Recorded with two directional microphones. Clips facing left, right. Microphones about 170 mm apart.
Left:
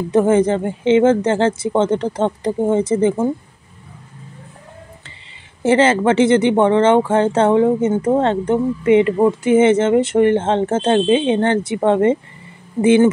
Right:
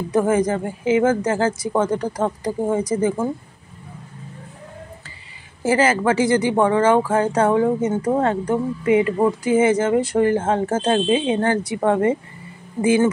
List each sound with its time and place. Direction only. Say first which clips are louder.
0.1 s speech: left 4 dB; 25° left (ahead or behind)
5.6 s speech: left 4 dB; 25° left (ahead or behind)